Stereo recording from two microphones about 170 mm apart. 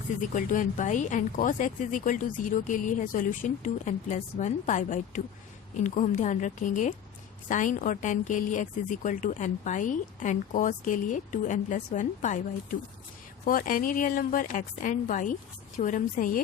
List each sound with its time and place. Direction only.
0.2 s speech: 50° left (ahead or behind)
13.4 s speech: 55° left (ahead or behind)